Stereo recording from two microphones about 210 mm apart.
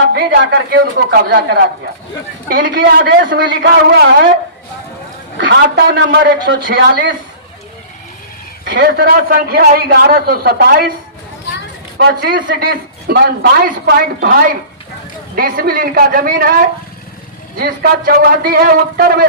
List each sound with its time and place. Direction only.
0.1 s a man's voice: 50° right (ahead or behind)
5.4 s a man's voice: 55° right (ahead or behind)
8.6 s a man's voice: 45° right (ahead or behind)
11.9 s a man's voice: 45° right (ahead or behind)
15.4 s a man's voice: 45° right (ahead or behind)